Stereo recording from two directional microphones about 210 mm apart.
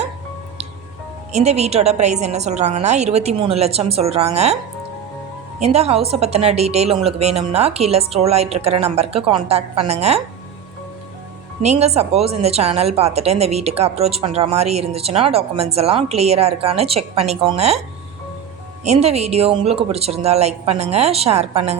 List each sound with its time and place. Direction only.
1.3 s a woman's voice: 30° right (ahead or behind)
5.5 s a woman's voice: 30° right (ahead or behind)
11.6 s a woman's voice: 30° right (ahead or behind)
18.9 s a woman's voice: 30° right (ahead or behind)